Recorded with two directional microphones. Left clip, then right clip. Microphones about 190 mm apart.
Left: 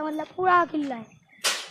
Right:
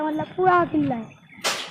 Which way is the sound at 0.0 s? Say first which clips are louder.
Right 4 dB; 35° left (ahead or behind).